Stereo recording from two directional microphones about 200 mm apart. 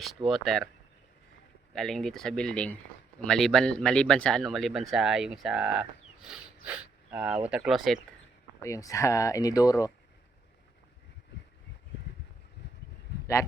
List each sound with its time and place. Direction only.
0.3 s speech: centre (ahead or behind)
1.7 s speech: centre (ahead or behind)
8.6 s speech: 15° left (ahead or behind)